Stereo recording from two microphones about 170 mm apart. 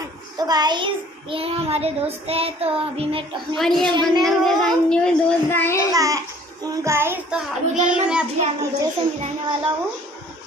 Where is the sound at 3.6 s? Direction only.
Centre (ahead or behind).